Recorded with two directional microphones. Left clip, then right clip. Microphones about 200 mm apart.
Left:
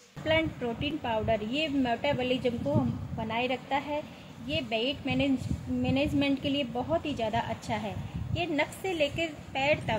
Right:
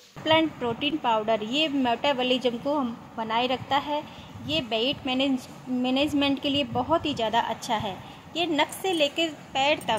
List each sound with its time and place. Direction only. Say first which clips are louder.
0.2 s a woman's voice: right 5 dB; 5° right (ahead or behind)